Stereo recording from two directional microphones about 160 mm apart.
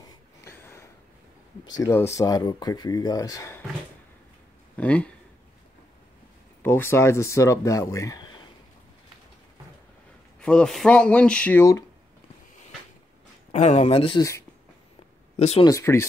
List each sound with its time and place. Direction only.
0.0 s a sound: 15° left (ahead or behind)
1.8 s speech: 15° left (ahead or behind)
4.7 s speech: 10° left (ahead or behind)
6.6 s speech: 15° left (ahead or behind)
10.4 s speech: 5° left (ahead or behind)
13.5 s speech: 45° left (ahead or behind)
15.3 s speech: 40° left (ahead or behind)
15.6 s speech: 20° left (ahead or behind)